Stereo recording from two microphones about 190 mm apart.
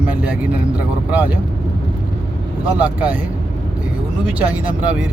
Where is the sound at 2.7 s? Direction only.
10° right (ahead or behind).